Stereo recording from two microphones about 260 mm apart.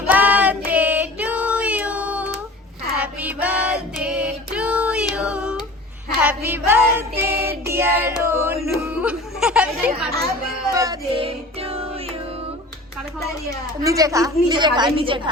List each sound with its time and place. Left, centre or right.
0.1 s child singing: centre
5.1 s a sound: centre
6.2 s music: centre
7.7 s child singing: centre
8.2 s music: centre
8.6 s a sound: centre
10.8 s child singing: centre
13.8 s a woman's voice: centre